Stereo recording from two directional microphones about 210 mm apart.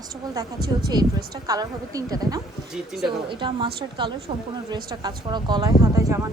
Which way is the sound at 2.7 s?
Centre (ahead or behind).